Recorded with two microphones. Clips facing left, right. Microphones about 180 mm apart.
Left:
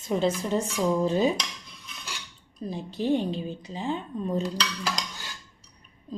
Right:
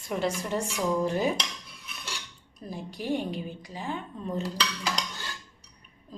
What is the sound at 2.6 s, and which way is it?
A woman's voice, 20° left (ahead or behind).